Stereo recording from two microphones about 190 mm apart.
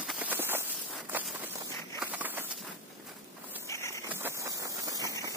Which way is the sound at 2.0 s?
10° right (ahead or behind).